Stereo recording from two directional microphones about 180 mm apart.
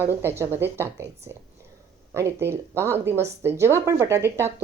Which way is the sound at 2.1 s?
15° right (ahead or behind).